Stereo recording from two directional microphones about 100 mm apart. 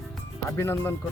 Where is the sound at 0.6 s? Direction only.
25° left (ahead or behind).